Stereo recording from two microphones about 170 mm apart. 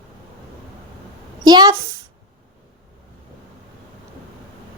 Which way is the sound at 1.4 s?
25° right (ahead or behind).